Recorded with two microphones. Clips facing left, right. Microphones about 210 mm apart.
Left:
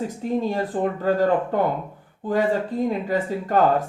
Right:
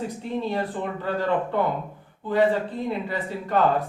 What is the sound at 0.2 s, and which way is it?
Speech, 40° left (ahead or behind).